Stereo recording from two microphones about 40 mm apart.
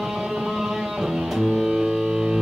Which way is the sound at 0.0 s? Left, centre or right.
Centre.